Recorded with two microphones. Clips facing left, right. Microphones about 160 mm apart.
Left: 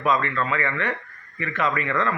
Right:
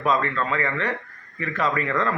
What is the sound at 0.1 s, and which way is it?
A man's voice, 35° right (ahead or behind).